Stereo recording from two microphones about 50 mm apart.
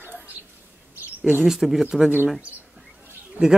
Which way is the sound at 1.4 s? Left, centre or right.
Centre.